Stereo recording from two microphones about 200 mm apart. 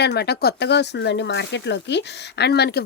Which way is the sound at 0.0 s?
55° left (ahead or behind).